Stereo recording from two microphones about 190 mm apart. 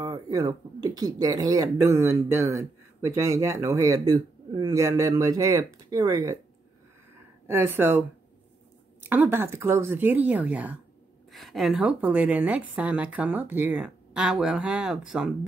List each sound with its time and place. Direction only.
0.0 s a man's voice: 20° right (ahead or behind)
7.4 s a man's voice: 10° right (ahead or behind)
9.1 s a man's voice: 10° right (ahead or behind)